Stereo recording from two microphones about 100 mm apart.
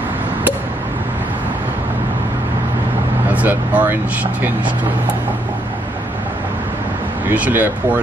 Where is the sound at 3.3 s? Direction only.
15° right (ahead or behind).